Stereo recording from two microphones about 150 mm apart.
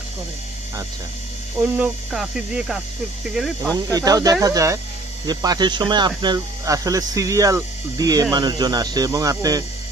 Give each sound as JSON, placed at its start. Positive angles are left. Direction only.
{"t": 1.6, "sound": "speech", "side_deg": -5}
{"t": 3.7, "sound": "speech", "side_deg": -25}